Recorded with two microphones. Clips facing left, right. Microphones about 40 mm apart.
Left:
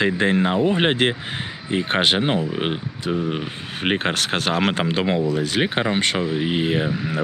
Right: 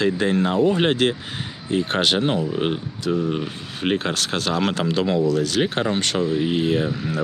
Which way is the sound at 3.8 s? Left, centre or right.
Left.